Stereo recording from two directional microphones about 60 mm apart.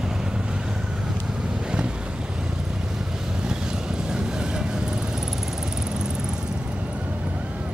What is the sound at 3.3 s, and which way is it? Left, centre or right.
Vehicle, centre.